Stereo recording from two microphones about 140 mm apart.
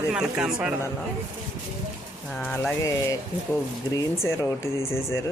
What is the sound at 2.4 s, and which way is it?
Speech, 10° left (ahead or behind).